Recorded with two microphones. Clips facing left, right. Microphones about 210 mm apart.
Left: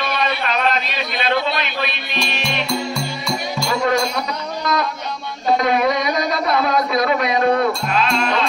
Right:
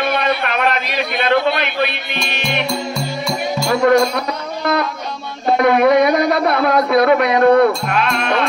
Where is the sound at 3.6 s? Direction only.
50° right (ahead or behind).